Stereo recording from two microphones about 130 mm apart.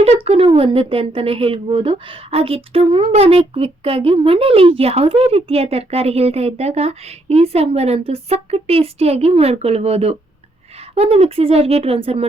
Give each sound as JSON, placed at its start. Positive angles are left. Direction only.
{"t": 0.0, "sound": "speech", "side_deg": -55}